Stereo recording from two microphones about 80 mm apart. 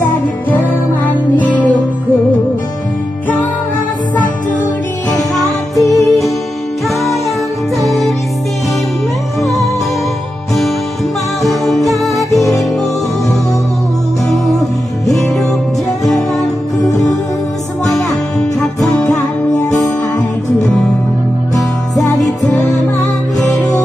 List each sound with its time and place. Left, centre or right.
5.8 s music: left
11.4 s music: centre
16.8 s music: left
21.9 s music: left